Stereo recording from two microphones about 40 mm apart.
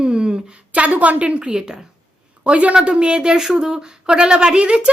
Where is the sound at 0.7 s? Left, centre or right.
Right; by 1.8 s centre.